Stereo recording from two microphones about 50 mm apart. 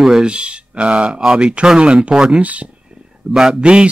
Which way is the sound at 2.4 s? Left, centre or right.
Right.